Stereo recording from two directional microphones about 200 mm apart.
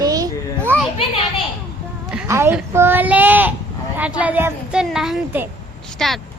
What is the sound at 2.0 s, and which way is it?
A woman's voice, 15° right (ahead or behind).